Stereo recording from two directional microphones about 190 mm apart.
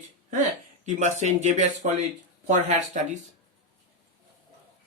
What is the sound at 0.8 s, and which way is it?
Speech, 40° right (ahead or behind).